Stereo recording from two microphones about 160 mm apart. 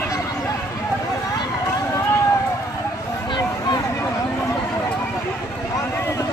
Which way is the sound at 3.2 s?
25° left (ahead or behind).